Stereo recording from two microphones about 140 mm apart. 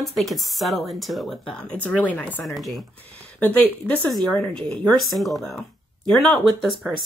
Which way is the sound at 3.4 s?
10° left (ahead or behind).